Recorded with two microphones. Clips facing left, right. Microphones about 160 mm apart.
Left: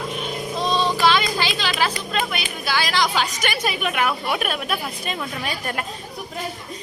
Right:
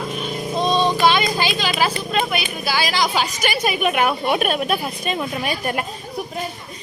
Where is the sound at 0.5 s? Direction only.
20° right (ahead or behind).